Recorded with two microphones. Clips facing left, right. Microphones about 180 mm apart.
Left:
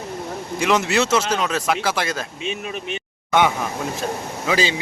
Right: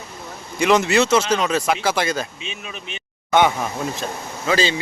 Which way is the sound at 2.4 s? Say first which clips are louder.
Left 7 dB; 50° left (ahead or behind).